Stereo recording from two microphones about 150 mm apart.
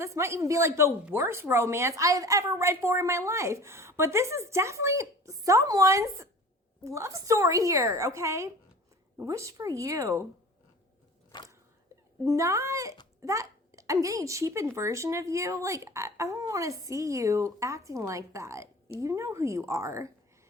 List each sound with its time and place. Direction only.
0.0 s speech: 20° right (ahead or behind)
12.2 s speech: 20° right (ahead or behind)